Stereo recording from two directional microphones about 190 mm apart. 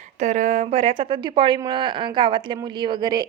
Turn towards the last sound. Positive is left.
turn(degrees=-20)  # may be behind; listen again after turning